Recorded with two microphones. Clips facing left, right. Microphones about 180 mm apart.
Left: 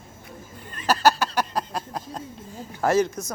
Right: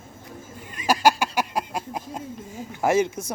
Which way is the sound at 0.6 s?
10° right (ahead or behind).